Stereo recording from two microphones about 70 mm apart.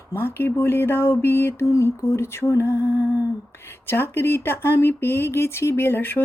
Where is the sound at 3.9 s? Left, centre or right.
Left.